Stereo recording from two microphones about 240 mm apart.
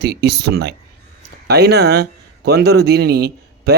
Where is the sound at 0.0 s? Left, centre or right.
Right.